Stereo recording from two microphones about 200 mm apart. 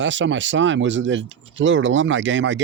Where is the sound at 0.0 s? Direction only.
65° right (ahead or behind).